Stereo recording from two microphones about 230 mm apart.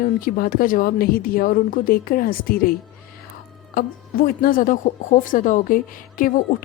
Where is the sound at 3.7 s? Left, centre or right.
Left.